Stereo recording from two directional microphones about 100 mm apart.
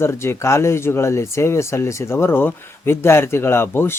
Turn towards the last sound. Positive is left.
turn(degrees=25)  # may be behind; listen again after turning